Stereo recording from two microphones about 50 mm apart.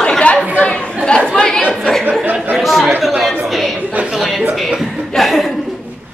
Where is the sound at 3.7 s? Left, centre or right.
Right.